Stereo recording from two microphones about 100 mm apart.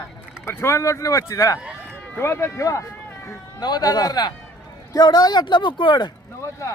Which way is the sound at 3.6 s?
45° left (ahead or behind).